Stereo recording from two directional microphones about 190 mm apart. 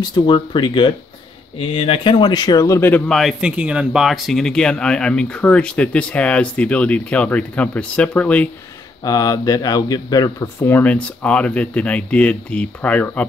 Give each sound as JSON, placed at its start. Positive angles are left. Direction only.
{"t": 0.0, "sound": "speech", "side_deg": 25}
{"t": 9.0, "sound": "speech", "side_deg": 20}